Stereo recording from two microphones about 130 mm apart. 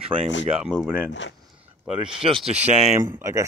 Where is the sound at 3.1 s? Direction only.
20° right (ahead or behind).